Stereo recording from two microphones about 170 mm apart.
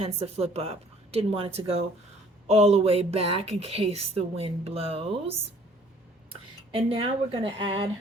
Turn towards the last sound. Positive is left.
turn(degrees=-30)  # may be behind; listen again after turning